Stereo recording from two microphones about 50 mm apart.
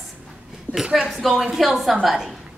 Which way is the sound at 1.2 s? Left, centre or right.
Centre.